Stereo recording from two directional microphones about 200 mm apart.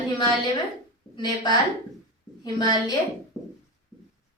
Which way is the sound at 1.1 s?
20° left (ahead or behind).